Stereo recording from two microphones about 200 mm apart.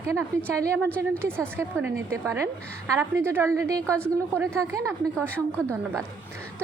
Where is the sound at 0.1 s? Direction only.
10° right (ahead or behind).